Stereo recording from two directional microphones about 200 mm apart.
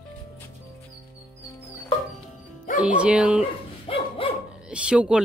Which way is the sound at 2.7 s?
5° right (ahead or behind).